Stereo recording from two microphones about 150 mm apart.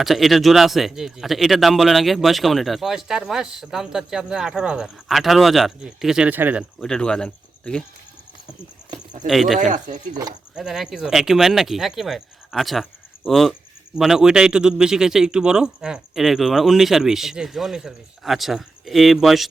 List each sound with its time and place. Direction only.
0.0 s speech: centre (ahead or behind)
6.7 s speech: 5° left (ahead or behind)
9.2 s speech: centre (ahead or behind)
9.6 s speech: 55° right (ahead or behind)
10.5 s speech: centre (ahead or behind)